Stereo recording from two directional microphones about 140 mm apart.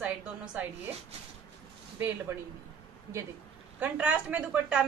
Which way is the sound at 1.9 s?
15° right (ahead or behind).